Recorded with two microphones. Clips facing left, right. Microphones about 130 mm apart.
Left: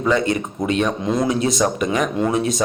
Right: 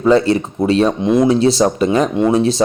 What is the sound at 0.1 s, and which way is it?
A man's voice, 30° right (ahead or behind).